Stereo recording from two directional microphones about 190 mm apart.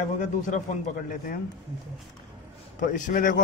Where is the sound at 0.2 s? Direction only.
40° left (ahead or behind).